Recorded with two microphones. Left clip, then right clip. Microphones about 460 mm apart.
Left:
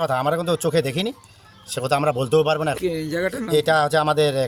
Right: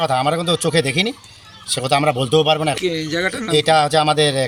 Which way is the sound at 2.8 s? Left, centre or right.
Left.